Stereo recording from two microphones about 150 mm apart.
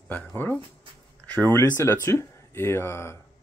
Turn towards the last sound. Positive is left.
turn(degrees=15)  # may be behind; listen again after turning